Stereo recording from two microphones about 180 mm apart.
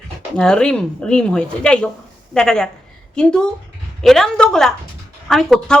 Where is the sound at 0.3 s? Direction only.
5° left (ahead or behind).